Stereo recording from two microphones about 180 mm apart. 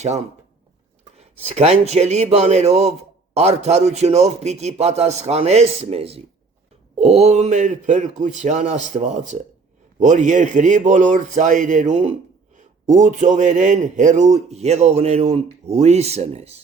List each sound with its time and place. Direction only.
0.0 s a man's voice: 40° right (ahead or behind)